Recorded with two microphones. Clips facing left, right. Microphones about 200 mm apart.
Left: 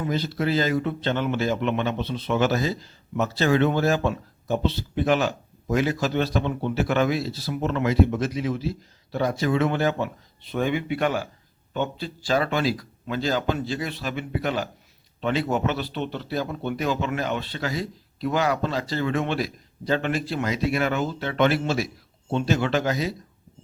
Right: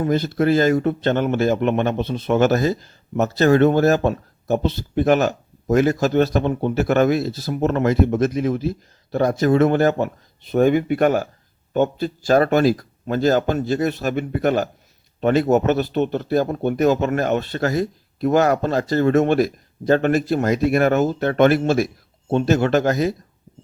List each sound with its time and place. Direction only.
0.0 s a man's voice: 50° right (ahead or behind)